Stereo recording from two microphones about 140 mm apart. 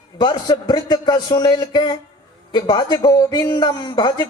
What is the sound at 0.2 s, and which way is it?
A man's voice, 30° left (ahead or behind).